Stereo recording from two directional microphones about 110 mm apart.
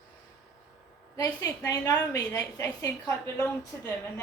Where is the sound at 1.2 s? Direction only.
35° left (ahead or behind).